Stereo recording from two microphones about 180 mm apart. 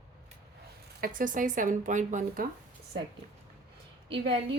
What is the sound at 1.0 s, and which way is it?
Speech, 50° right (ahead or behind).